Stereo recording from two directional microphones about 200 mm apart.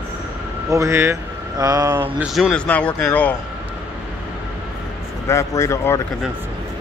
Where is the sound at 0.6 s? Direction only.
15° right (ahead or behind).